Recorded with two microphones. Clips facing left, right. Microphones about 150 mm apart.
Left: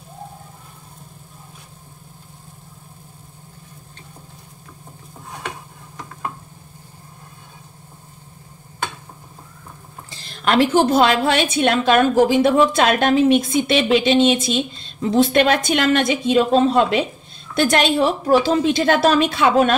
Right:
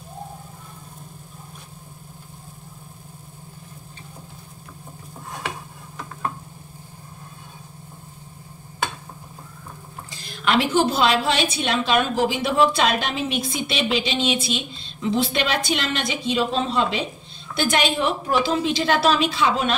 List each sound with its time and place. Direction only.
10.4 s a woman's voice: 45° left (ahead or behind)
17.6 s a woman's voice: 40° left (ahead or behind)